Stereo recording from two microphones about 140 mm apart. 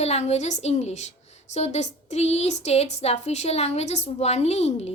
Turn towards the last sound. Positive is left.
turn(degrees=50)  # may be behind; listen again after turning